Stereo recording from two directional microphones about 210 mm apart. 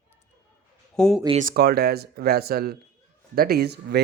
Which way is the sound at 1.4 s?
45° right (ahead or behind).